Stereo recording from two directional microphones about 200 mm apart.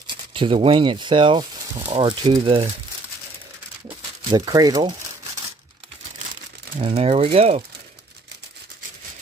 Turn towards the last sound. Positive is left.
turn(degrees=-30)  # may be behind; listen again after turning